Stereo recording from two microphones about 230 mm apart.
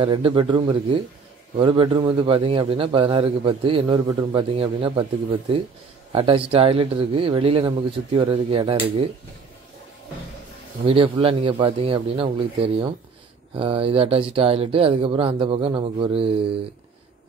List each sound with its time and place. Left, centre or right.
0.0 s a man's voice: right
6.1 s a man's voice: right
10.9 s a man's voice: right